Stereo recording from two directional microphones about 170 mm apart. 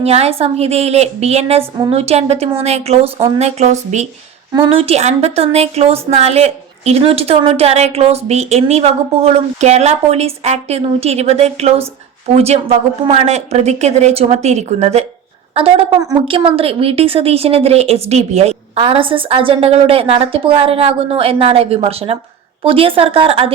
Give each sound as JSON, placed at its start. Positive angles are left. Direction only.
{"t": 0.0, "sound": "speech", "side_deg": -40}
{"t": 15.9, "sound": "a woman's voice", "side_deg": -20}
{"t": 16.2, "sound": "speech", "side_deg": -35}